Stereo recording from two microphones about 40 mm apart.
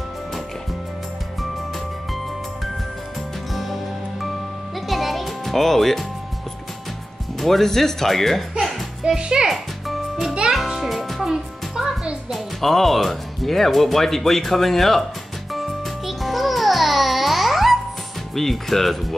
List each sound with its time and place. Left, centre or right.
3.5 s music: centre
7.3 s speech: centre
8.5 s music: centre
9.1 s a child's voice: centre
9.5 s music: centre
11.2 s music: centre
12.3 s speech: centre
15.5 s music: centre
18.3 s speech: centre